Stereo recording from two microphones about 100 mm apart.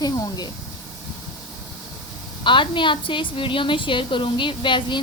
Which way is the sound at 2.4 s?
55° left (ahead or behind).